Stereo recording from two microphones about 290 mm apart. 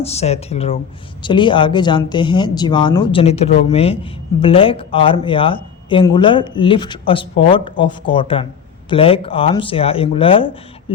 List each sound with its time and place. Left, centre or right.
0.0 s speech: left